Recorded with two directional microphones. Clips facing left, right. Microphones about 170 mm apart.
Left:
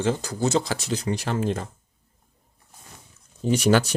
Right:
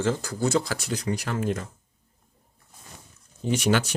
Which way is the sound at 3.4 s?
40° left (ahead or behind).